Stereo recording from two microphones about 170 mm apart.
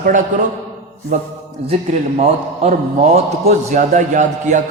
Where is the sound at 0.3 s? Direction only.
50° right (ahead or behind).